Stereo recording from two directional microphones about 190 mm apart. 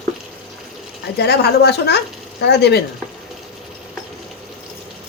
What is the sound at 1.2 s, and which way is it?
A woman's voice, 60° left (ahead or behind).